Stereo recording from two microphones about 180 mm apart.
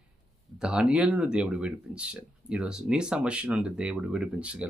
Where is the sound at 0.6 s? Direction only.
5° right (ahead or behind).